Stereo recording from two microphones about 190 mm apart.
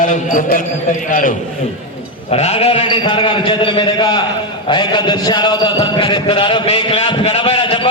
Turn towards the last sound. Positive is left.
turn(degrees=25)  # may be behind; listen again after turning